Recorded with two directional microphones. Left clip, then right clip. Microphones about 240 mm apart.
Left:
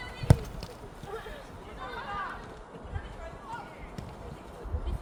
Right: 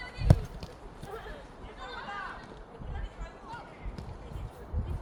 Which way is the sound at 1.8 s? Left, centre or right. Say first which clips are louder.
Left 3 dB; right.